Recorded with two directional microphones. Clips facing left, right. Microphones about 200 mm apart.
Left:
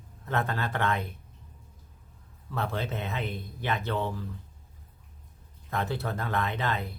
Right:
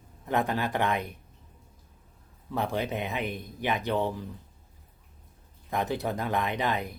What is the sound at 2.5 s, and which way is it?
Speech, 15° right (ahead or behind).